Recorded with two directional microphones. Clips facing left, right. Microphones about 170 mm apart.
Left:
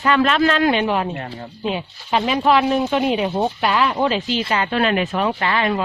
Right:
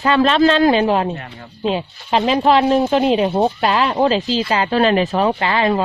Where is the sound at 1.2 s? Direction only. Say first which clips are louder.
Left 4 dB; 35° left (ahead or behind).